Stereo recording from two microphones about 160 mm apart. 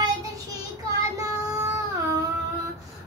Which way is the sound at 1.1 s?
20° right (ahead or behind).